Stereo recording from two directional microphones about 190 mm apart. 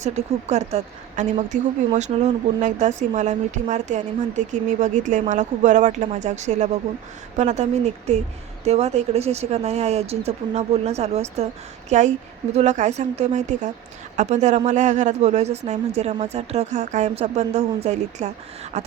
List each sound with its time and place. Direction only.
0.0 s speech: 35° right (ahead or behind)